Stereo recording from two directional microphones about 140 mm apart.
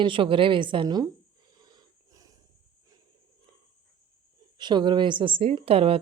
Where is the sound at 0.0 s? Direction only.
40° right (ahead or behind).